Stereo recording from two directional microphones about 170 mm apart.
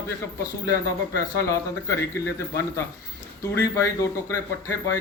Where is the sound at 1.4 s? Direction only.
15° left (ahead or behind).